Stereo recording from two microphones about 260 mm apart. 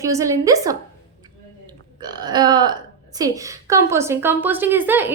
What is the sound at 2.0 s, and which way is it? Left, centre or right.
A woman's voice, centre.